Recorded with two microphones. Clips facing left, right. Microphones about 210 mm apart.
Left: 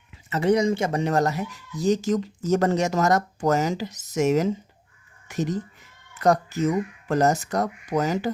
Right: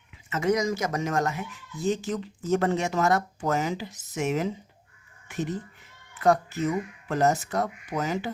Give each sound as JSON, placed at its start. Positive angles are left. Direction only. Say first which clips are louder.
{"t": 0.3, "sound": "speech", "louder": "left 4 dB", "side_deg": 35}